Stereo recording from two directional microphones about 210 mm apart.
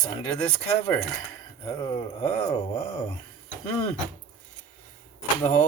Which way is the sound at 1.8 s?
20° left (ahead or behind).